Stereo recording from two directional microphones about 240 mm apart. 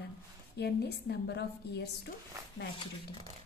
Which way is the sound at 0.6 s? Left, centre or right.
Left.